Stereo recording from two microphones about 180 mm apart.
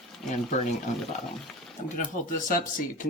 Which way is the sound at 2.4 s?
50° left (ahead or behind).